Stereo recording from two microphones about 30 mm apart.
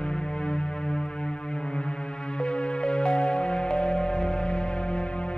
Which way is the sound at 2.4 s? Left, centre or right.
Left.